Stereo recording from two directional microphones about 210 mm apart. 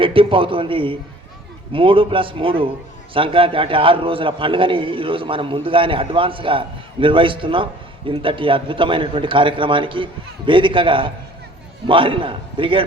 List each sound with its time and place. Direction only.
0.0 s a man's voice: 25° right (ahead or behind)